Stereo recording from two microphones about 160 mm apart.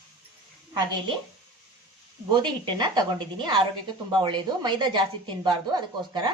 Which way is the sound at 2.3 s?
30° right (ahead or behind).